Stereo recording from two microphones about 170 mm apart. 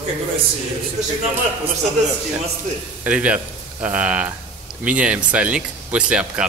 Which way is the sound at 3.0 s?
10° right (ahead or behind).